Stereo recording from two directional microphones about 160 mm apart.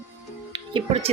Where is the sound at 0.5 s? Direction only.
35° right (ahead or behind).